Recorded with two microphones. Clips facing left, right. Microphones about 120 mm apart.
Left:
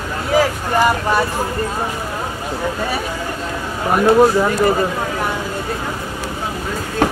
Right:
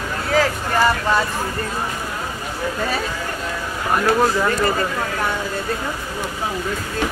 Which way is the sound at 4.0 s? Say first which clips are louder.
Left 6 dB; 20° left (ahead or behind).